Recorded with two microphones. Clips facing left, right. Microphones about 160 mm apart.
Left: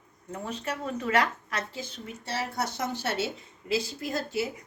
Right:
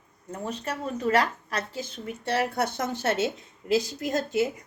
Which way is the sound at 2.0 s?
60° right (ahead or behind).